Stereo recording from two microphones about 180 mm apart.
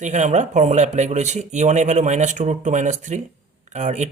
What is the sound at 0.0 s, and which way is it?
Speech, 40° right (ahead or behind).